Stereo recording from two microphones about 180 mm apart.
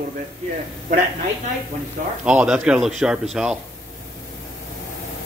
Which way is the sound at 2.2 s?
5° right (ahead or behind).